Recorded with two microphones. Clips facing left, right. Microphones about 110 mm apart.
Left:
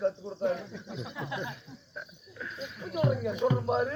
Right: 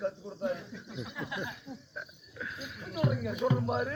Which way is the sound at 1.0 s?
Centre (ahead or behind).